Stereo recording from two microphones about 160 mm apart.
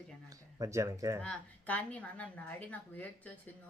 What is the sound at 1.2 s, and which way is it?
A woman's voice, 10° left (ahead or behind).